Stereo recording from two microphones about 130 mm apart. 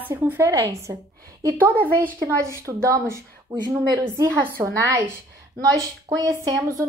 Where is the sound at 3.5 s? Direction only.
35° right (ahead or behind).